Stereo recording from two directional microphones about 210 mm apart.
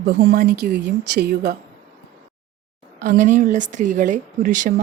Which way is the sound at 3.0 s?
35° right (ahead or behind).